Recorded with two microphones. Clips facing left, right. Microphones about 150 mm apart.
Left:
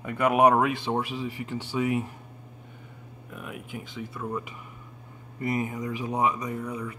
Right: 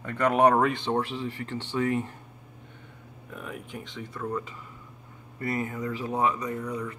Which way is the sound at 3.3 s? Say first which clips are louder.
Even; 5° left (ahead or behind).